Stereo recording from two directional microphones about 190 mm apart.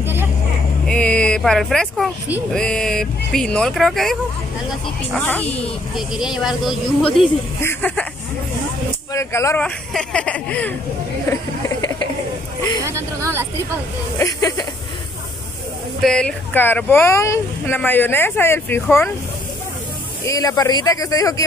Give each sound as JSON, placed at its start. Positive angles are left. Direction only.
{"t": 0.0, "sound": "vehicle", "side_deg": -10}
{"t": 0.8, "sound": "speech", "side_deg": 5}
{"t": 5.9, "sound": "speech", "side_deg": 0}
{"t": 9.1, "sound": "speech", "side_deg": 15}
{"t": 12.8, "sound": "speech", "side_deg": -15}
{"t": 14.1, "sound": "speech", "side_deg": 20}
{"t": 16.0, "sound": "speech", "side_deg": 5}
{"t": 20.2, "sound": "speech", "side_deg": 20}